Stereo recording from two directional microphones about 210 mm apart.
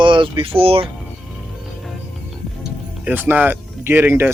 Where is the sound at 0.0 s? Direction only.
25° right (ahead or behind).